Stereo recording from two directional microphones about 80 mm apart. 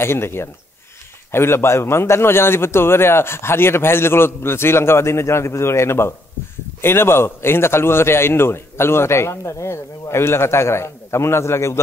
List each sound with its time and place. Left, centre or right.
0.0 s a man's voice: left